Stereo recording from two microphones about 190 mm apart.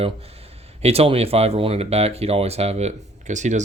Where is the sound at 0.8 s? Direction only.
30° right (ahead or behind).